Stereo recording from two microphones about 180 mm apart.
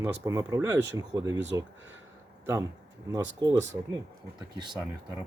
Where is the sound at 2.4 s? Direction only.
15° right (ahead or behind).